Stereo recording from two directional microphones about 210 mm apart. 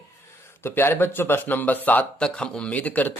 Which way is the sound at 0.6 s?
10° left (ahead or behind).